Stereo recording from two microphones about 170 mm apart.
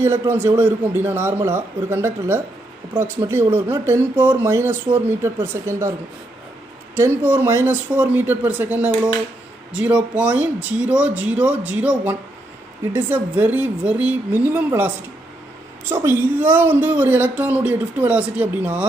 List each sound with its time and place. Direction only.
0.0 s a woman's voice: 15° right (ahead or behind)
7.0 s a woman's voice: 15° right (ahead or behind)
15.9 s a woman's voice: 15° right (ahead or behind)